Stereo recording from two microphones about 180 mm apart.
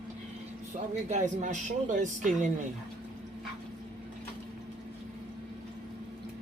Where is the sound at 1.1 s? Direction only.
40° right (ahead or behind).